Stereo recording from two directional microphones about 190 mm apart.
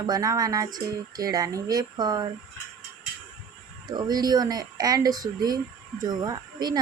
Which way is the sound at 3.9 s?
20° right (ahead or behind).